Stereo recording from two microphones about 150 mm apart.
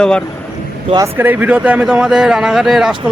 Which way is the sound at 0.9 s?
15° right (ahead or behind).